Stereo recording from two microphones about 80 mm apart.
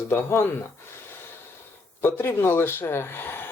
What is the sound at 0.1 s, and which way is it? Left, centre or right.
Speech, left.